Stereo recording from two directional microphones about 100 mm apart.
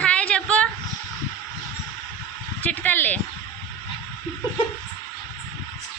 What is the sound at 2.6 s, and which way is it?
Speech, 15° left (ahead or behind).